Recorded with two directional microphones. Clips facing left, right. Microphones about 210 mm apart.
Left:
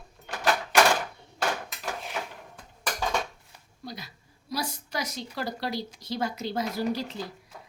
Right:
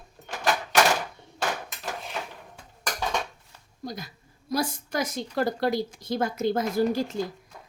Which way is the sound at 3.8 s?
45° right (ahead or behind).